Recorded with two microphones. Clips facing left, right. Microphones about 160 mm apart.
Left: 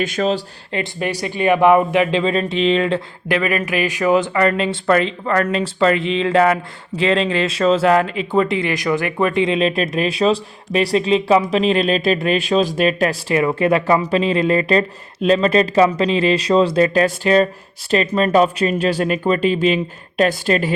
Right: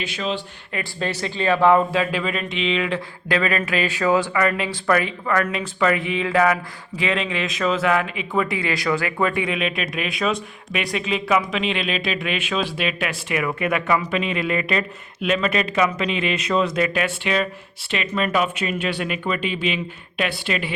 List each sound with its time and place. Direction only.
0.0 s speech: 45° left (ahead or behind)
0.9 s speech: 15° left (ahead or behind); by 3.0 s 35° left (ahead or behind)
3.2 s speech: 15° left (ahead or behind)
4.4 s speech: 30° left (ahead or behind)
8.0 s speech: 10° right (ahead or behind)
8.3 s speech: 25° left (ahead or behind)